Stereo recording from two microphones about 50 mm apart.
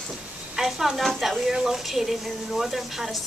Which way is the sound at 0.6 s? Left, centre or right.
Centre.